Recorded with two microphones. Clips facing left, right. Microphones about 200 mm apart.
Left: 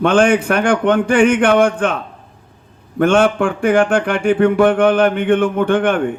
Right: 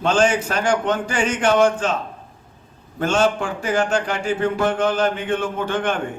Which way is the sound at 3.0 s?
60° left (ahead or behind).